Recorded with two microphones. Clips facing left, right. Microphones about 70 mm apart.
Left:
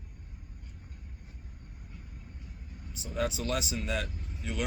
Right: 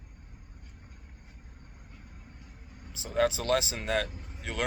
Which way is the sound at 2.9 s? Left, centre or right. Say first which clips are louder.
Right 6 dB; right.